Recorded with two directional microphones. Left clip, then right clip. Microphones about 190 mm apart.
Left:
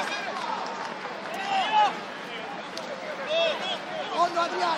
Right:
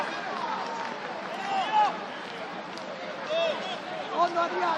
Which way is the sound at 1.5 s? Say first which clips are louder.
Left 2 dB; 20° left (ahead or behind).